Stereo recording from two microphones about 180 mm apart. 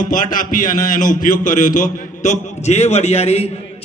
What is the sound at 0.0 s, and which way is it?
A man's voice, 45° left (ahead or behind).